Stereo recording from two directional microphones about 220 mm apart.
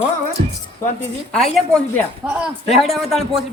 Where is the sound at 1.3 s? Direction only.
5° left (ahead or behind).